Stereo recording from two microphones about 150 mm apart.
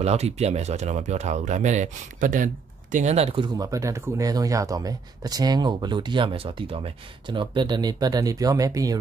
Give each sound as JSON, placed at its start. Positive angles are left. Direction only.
{"t": 0.0, "sound": "speech", "side_deg": -45}